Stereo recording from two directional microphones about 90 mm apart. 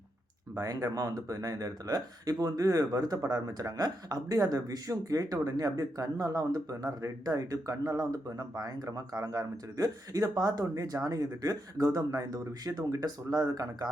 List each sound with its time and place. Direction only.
0.5 s speech: 40° right (ahead or behind)